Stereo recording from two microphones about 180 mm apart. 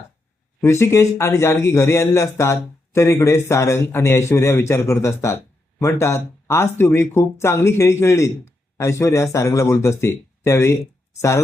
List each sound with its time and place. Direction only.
0.6 s speech: 15° left (ahead or behind)